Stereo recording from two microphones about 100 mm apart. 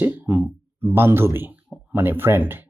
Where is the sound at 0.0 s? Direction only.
20° right (ahead or behind).